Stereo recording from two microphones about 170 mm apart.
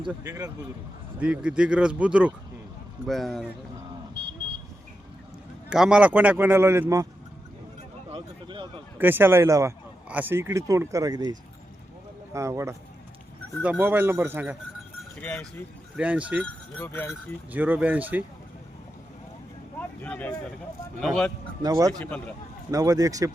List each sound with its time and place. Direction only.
0.2 s speech: 20° right (ahead or behind)
1.2 s speech: 5° right (ahead or behind)
5.6 s speech: 5° right (ahead or behind)
8.1 s a sound: 30° right (ahead or behind)
9.0 s speech: 10° right (ahead or behind)
15.2 s speech: 5° left (ahead or behind)
16.0 s speech: 10° right (ahead or behind)
16.8 s speech: 10° left (ahead or behind)
17.1 s speech: 10° right (ahead or behind)
20.0 s speech: 10° left (ahead or behind)
21.6 s speech: 20° right (ahead or behind)
22.0 s speech: 10° left (ahead or behind)
22.7 s speech: 20° right (ahead or behind)